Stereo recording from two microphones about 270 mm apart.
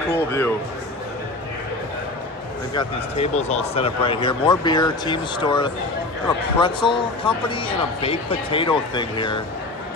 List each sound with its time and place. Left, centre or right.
0.1 s speech: centre
2.7 s a man's voice: centre